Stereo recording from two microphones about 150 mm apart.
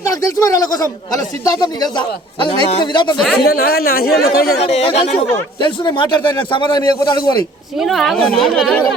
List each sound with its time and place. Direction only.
0.1 s speech: 25° left (ahead or behind)
3.3 s speech: 90° left
4.5 s speech: 45° left (ahead or behind)
5.5 s a man's voice: 30° left (ahead or behind)
7.8 s a woman's voice: centre (ahead or behind)